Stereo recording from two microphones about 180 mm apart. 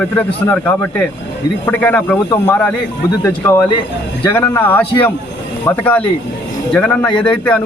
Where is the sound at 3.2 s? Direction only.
15° left (ahead or behind).